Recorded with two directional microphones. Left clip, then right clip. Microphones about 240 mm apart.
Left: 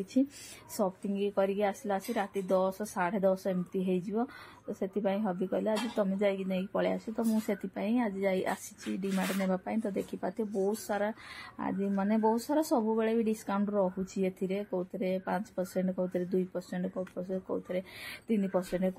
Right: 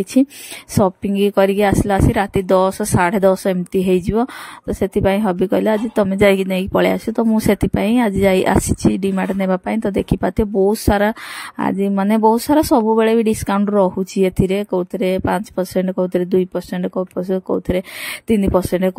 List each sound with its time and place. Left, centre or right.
0.0 s speech: right